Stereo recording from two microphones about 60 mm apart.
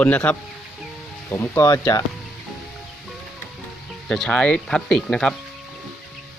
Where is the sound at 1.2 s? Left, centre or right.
Left.